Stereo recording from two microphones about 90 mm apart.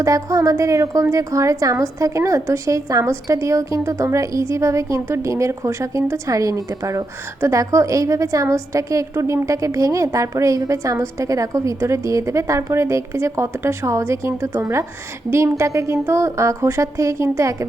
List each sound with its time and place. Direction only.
0.0 s a woman's voice: 40° right (ahead or behind)